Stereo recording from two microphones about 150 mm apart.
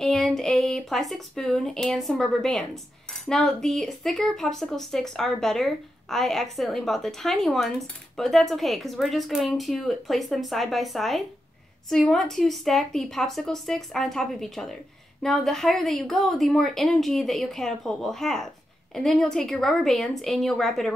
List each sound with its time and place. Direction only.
0.0 s speech: centre (ahead or behind)